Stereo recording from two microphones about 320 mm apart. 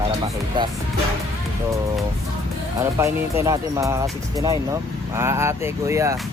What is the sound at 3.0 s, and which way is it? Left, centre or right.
Speech, centre.